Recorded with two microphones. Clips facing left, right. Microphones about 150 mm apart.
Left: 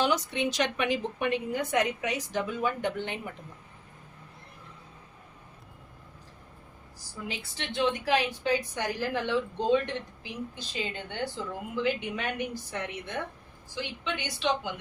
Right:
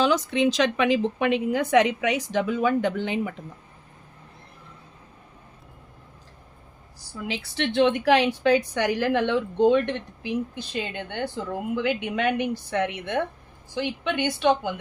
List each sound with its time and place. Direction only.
0.0 s a woman's voice: 90° right
7.3 s a woman's voice: 80° right
13.7 s speech: 55° right (ahead or behind)